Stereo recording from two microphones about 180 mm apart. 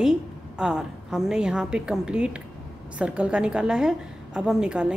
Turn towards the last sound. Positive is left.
turn(degrees=-5)  # may be behind; listen again after turning